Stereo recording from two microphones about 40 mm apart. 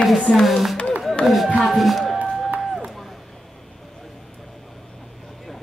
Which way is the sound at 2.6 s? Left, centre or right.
Centre.